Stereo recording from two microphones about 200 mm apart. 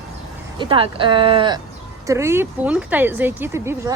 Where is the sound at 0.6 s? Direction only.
25° right (ahead or behind).